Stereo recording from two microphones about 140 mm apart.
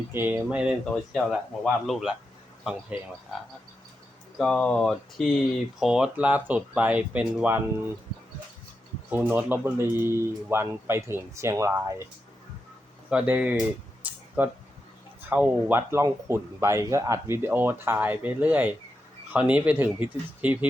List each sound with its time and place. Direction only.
0.1 s speech: 15° right (ahead or behind); by 2.1 s centre (ahead or behind)
4.4 s speech: 5° left (ahead or behind); by 7.6 s 10° right (ahead or behind)
9.0 s speech: 15° right (ahead or behind)
13.1 s speech: 10° right (ahead or behind)
14.0 s a sound: 10° right (ahead or behind)
15.3 s speech: 15° right (ahead or behind)